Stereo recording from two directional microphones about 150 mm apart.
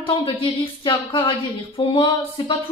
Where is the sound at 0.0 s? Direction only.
35° left (ahead or behind).